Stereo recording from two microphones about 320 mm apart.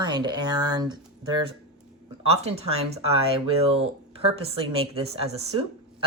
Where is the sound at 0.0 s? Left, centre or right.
Centre.